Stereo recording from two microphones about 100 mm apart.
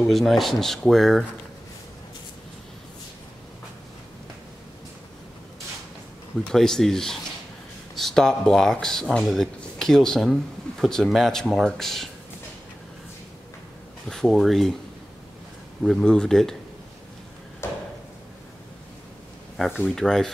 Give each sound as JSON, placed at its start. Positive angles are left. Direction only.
{"t": 0.0, "sound": "speech", "side_deg": 0}
{"t": 6.5, "sound": "speech", "side_deg": 5}
{"t": 14.0, "sound": "speech", "side_deg": 5}
{"t": 15.8, "sound": "speech", "side_deg": 5}
{"t": 17.6, "sound": "a sound", "side_deg": 25}
{"t": 19.8, "sound": "speech", "side_deg": 5}